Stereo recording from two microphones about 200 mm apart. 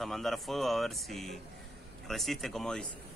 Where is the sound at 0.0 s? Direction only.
Centre (ahead or behind).